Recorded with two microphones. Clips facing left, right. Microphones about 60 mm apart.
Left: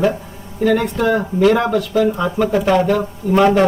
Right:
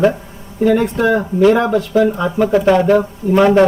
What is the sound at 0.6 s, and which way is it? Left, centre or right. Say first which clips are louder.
Speech: right 2 dB; centre.